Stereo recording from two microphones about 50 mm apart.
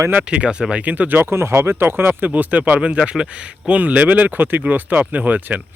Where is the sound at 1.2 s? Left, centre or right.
Right.